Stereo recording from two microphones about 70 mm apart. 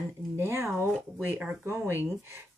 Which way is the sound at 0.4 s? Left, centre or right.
Right.